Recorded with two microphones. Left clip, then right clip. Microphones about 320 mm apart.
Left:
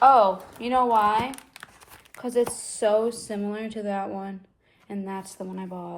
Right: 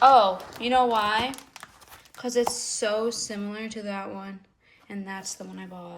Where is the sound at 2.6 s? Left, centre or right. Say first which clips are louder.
Left 4 dB; centre.